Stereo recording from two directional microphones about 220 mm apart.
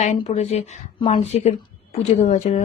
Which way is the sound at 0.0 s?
30° left (ahead or behind).